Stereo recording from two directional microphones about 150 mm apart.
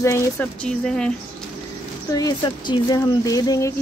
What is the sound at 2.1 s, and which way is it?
Speech, 30° left (ahead or behind).